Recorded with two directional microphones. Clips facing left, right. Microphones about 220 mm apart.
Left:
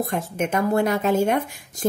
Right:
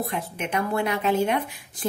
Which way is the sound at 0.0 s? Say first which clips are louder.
Left 5 dB; 45° left (ahead or behind).